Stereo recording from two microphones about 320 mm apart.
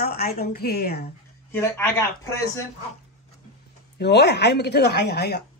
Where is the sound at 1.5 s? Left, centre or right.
Centre.